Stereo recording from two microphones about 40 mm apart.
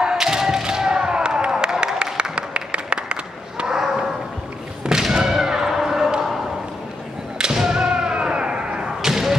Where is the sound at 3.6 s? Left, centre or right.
Centre.